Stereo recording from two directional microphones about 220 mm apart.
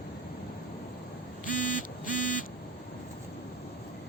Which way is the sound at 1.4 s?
40° left (ahead or behind).